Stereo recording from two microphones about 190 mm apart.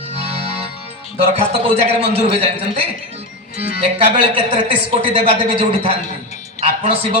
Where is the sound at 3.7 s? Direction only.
30° right (ahead or behind).